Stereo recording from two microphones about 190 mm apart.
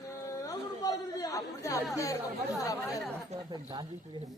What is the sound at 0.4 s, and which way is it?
Chatter, 20° left (ahead or behind).